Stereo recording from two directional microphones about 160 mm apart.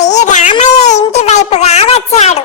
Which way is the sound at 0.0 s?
45° left (ahead or behind).